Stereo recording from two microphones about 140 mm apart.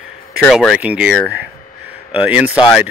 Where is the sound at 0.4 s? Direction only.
5° left (ahead or behind).